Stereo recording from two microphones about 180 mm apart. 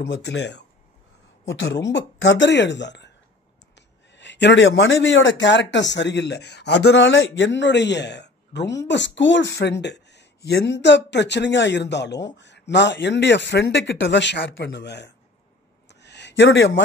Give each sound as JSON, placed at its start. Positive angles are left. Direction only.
{"t": 0.0, "sound": "speech", "side_deg": 75}
{"t": 1.5, "sound": "speech", "side_deg": 90}
{"t": 15.9, "sound": "a sound", "side_deg": 70}